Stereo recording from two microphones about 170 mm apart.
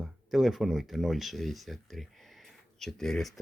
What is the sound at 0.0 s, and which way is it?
Speech, centre (ahead or behind).